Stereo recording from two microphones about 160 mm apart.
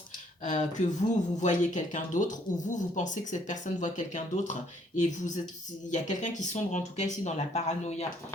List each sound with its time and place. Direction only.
0.4 s speech: 50° left (ahead or behind)